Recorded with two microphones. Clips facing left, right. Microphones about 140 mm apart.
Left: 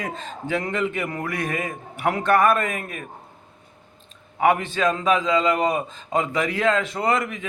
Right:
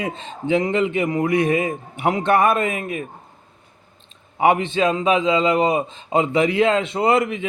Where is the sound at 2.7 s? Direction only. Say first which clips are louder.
Right 5 dB; 45° left (ahead or behind).